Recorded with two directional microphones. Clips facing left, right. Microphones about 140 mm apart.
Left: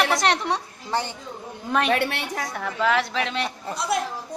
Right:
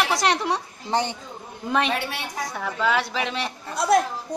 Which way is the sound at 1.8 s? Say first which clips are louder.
Left 4 dB; 55° left (ahead or behind).